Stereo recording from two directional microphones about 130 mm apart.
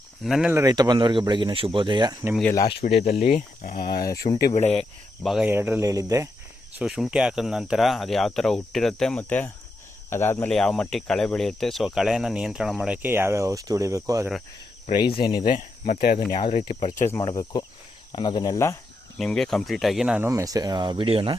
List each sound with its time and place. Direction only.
0.2 s speech: centre (ahead or behind)
0.5 s speech: 25° right (ahead or behind)
2.8 s speech: 55° left (ahead or behind)
4.7 s speech: centre (ahead or behind)
5.5 s speech: 15° right (ahead or behind)
6.7 s speech: 5° right (ahead or behind); by 10.5 s 20° left (ahead or behind)
10.5 s speech: 5° left (ahead or behind); by 14.3 s 25° right (ahead or behind)
14.9 s speech: 35° left (ahead or behind)
15.4 s speech: 90° left
16.4 s speech: 55° left (ahead or behind)
17.0 s speech: 20° left (ahead or behind)
19.2 s speech: 5° left (ahead or behind)
20.2 s speech: 25° right (ahead or behind); by 21.3 s 45° right (ahead or behind)